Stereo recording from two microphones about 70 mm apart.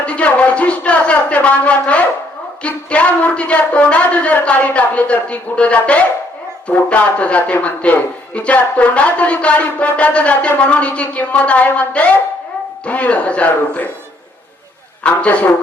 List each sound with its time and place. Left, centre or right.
0.0 s a man's voice: centre
15.0 s a man's voice: centre